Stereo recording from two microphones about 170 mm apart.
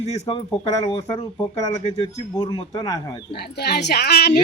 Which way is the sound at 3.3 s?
70° left (ahead or behind).